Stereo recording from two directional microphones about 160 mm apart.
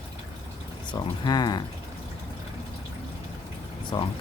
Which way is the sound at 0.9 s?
25° left (ahead or behind).